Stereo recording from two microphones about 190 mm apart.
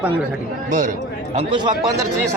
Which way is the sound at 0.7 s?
40° right (ahead or behind).